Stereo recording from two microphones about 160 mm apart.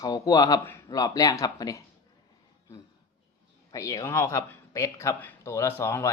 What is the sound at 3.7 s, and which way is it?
Speech, 20° left (ahead or behind).